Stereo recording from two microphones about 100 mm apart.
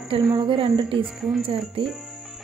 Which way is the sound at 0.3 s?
55° right (ahead or behind).